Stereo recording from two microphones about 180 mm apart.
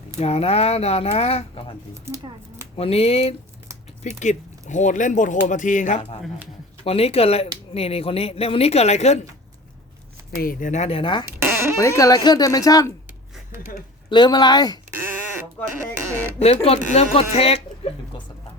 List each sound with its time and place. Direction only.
0.2 s speech: 35° left (ahead or behind)
2.0 s speech: 15° right (ahead or behind)
2.7 s speech: 35° left (ahead or behind)
10.3 s speech: 50° left (ahead or behind); by 11.3 s 25° left (ahead or behind)
11.3 s a sound: 15° right (ahead or behind)
11.8 s speech: 15° left (ahead or behind)
14.1 s speech: 25° left (ahead or behind)
16.4 s speech: 35° left (ahead or behind)